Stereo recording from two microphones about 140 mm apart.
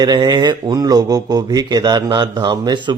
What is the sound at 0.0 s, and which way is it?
Speech, 30° right (ahead or behind).